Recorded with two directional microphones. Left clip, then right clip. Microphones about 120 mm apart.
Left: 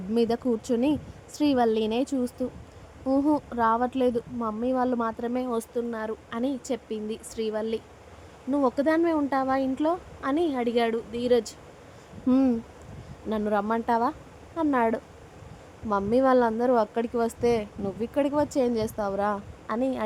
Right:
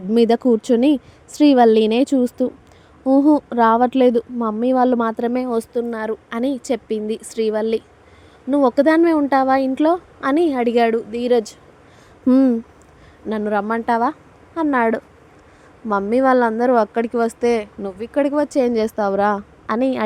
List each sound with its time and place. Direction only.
0.1 s speech: 40° right (ahead or behind)
12.3 s speech: 25° right (ahead or behind)